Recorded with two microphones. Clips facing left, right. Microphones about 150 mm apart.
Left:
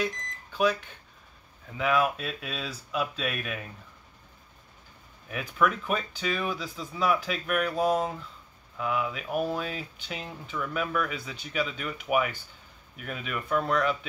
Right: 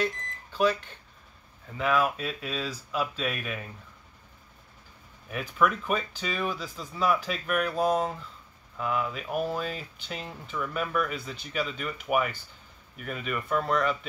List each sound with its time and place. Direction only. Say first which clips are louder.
0.0 s a sound: right 1 dB; centre (ahead or behind)
1.8 s speech: even; centre (ahead or behind)
5.3 s speech: right 1 dB; centre (ahead or behind)